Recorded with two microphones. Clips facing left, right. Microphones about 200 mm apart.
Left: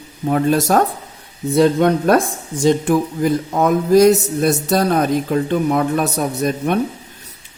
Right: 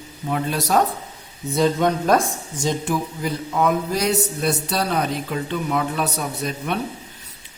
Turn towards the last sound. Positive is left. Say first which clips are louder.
# left 7 dB
turn(degrees=45)  # may be behind; listen again after turning